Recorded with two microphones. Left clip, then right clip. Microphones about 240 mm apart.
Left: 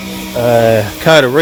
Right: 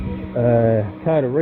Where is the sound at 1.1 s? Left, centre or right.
Left.